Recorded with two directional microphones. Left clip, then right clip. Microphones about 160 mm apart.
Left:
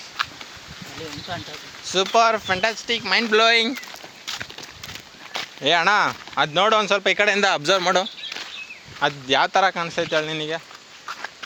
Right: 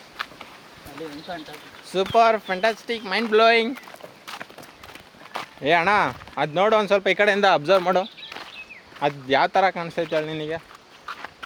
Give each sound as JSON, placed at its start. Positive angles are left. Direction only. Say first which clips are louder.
{"t": 0.2, "sound": "a sound", "louder": "left 6 dB", "side_deg": 25}
{"t": 1.9, "sound": "speech", "louder": "even", "side_deg": 0}
{"t": 5.3, "sound": "speech", "louder": "left 1 dB", "side_deg": 0}
{"t": 7.4, "sound": "speech", "louder": "right 1 dB", "side_deg": 15}
{"t": 9.0, "sound": "speech", "louder": "left 1 dB", "side_deg": 0}